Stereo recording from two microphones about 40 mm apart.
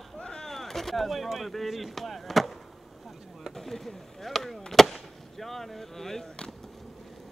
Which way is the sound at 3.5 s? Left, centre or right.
Centre.